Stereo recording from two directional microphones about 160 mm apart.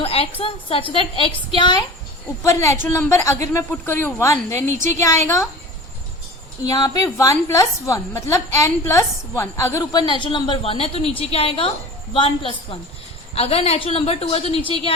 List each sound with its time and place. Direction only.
0.0 s a sound: 40° left (ahead or behind)
0.3 s a woman's voice: 35° left (ahead or behind)
2.4 s speech: 20° left (ahead or behind)
6.6 s a woman's voice: 25° left (ahead or behind)
10.0 s a woman's voice: 30° left (ahead or behind)